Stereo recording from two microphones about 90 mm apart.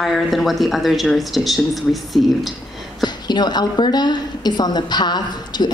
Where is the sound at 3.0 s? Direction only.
50° left (ahead or behind).